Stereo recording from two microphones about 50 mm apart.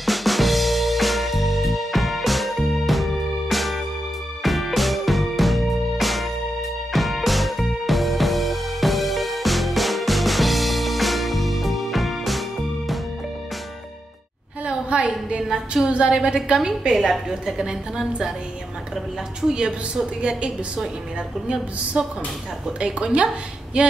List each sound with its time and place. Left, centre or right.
0.0 s music: centre
14.7 s a sound: right
15.4 s a woman's voice: centre
19.4 s a woman's voice: centre
22.0 s a woman's voice: right